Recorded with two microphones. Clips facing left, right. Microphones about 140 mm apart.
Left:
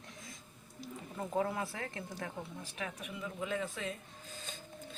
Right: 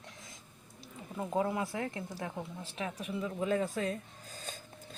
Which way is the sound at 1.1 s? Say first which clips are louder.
Right 3 dB; 15° right (ahead or behind).